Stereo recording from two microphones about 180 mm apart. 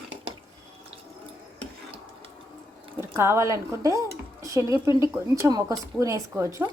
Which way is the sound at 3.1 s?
15° right (ahead or behind).